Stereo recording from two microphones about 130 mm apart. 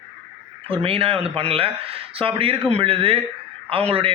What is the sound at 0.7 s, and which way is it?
A man's voice, 45° right (ahead or behind).